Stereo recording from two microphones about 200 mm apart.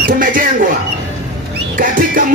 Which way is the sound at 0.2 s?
45° right (ahead or behind).